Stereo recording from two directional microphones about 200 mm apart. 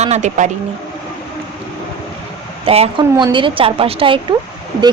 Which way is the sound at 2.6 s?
30° right (ahead or behind).